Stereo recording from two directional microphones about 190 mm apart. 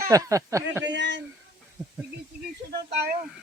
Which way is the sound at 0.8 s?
70° right (ahead or behind).